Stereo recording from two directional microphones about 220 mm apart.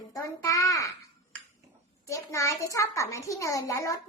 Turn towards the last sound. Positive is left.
turn(degrees=15)  # may be behind; listen again after turning